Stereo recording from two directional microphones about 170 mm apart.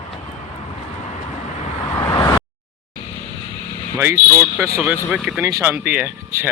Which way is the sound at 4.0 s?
15° right (ahead or behind).